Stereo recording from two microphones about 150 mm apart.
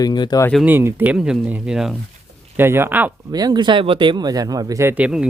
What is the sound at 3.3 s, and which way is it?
Speech, 25° right (ahead or behind).